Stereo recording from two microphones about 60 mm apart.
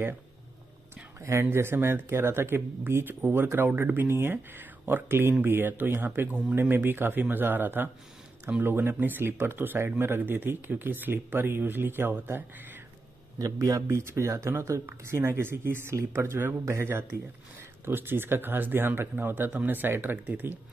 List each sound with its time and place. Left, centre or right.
1.2 s speech: right
13.4 s speech: right